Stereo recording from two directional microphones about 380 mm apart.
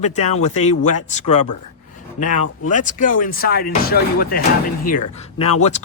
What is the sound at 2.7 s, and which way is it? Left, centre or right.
Speech, centre.